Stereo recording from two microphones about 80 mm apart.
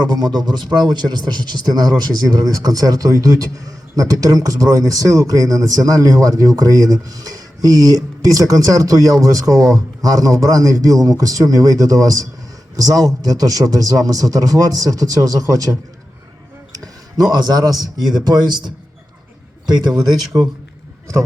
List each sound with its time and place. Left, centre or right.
0.0 s speech: right
13.6 s speech: right
16.7 s speech: right